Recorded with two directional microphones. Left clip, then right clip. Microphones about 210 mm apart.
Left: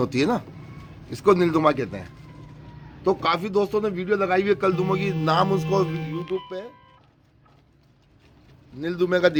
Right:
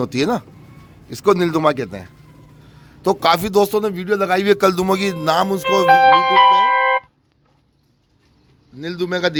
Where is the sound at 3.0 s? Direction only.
60° right (ahead or behind).